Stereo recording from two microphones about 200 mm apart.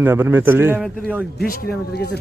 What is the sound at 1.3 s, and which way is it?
Speech, 50° left (ahead or behind).